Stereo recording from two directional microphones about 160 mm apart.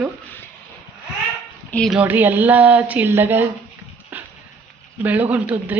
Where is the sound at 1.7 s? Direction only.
5° left (ahead or behind).